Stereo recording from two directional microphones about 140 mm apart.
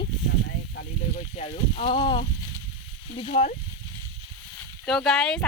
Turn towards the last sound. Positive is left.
turn(degrees=5)  # may be behind; listen again after turning